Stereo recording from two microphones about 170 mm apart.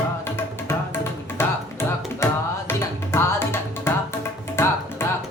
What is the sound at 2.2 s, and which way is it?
Tabla, 15° left (ahead or behind).